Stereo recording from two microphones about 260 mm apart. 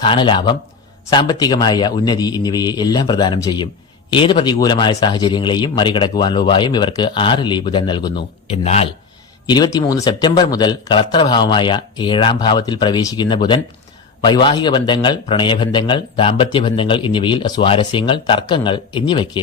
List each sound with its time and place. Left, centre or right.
0.0 s a man's voice: centre